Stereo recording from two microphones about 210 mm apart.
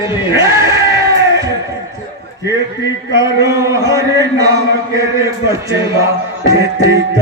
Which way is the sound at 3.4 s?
15° right (ahead or behind).